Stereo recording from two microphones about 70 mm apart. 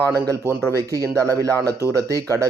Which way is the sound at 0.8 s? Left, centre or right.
Right.